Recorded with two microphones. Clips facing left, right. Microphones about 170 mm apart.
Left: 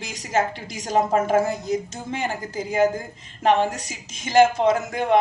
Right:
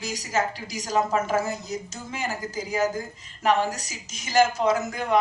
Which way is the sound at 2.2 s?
55° left (ahead or behind).